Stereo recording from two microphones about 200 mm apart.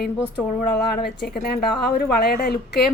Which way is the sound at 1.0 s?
50° left (ahead or behind).